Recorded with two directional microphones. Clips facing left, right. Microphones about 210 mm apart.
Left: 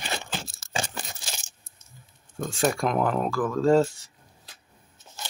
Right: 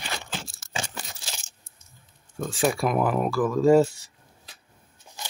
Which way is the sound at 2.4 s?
5° right (ahead or behind).